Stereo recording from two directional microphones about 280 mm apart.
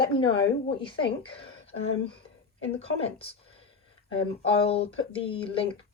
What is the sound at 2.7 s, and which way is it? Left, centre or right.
Speech, left.